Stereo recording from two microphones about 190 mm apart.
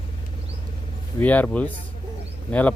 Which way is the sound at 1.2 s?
10° left (ahead or behind).